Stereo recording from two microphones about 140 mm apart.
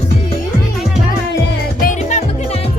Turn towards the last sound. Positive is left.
turn(degrees=60)  # may be behind; listen again after turning